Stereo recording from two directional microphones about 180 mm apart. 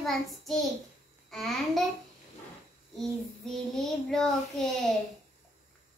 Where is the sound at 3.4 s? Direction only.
Centre (ahead or behind).